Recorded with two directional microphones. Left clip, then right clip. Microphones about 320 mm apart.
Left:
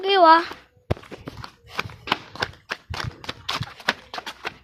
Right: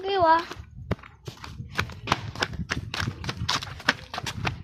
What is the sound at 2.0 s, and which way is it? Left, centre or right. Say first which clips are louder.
Horse: left 2 dB; centre.